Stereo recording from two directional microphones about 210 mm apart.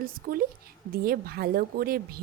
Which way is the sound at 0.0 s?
45° right (ahead or behind).